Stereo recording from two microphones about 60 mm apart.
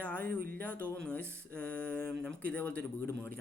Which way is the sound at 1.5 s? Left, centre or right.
Left.